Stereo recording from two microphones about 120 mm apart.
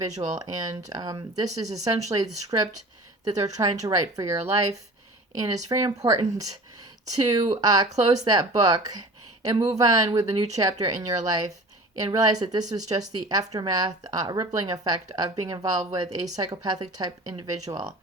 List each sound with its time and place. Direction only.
0.0 s speech: 30° right (ahead or behind)